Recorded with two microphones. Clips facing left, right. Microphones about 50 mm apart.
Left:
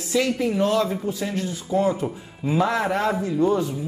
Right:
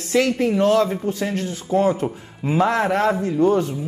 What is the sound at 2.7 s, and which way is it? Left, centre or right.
A man's voice, right.